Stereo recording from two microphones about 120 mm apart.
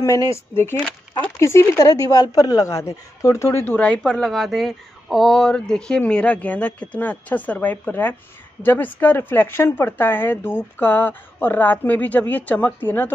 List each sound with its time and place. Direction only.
0.0 s speech: 25° left (ahead or behind)
0.7 s speech: 10° left (ahead or behind)
1.4 s a woman's voice: 25° left (ahead or behind)